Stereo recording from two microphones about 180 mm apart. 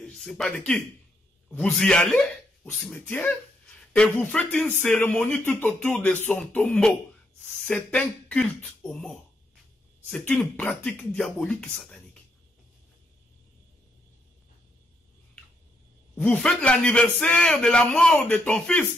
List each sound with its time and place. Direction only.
0.0 s a man's voice: centre (ahead or behind)
16.2 s a man's voice: 5° left (ahead or behind)